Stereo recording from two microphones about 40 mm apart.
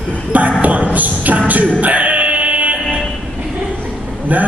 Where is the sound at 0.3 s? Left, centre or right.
Right.